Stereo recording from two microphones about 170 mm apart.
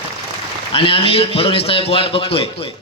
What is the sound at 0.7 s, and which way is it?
A man's voice, 35° left (ahead or behind).